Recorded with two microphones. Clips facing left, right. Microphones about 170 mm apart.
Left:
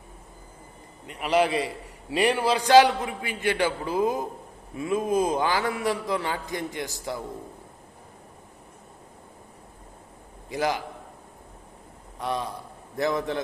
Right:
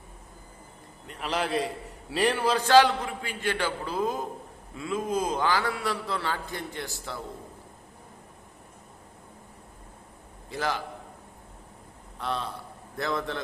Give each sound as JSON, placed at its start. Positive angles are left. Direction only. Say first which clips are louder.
{"t": 1.0, "sound": "a man's voice", "louder": "left 7 dB", "side_deg": 10}
{"t": 10.5, "sound": "a man's voice", "louder": "left 4 dB", "side_deg": 15}
{"t": 12.2, "sound": "a man's voice", "louder": "left 3 dB", "side_deg": 15}